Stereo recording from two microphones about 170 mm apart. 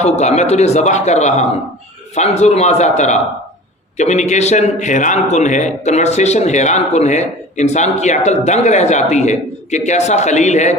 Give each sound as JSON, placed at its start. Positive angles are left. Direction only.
{"t": 0.0, "sound": "a man's voice", "side_deg": 40}